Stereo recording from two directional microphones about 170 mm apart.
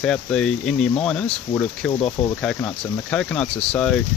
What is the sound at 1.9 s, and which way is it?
Speech, 35° left (ahead or behind).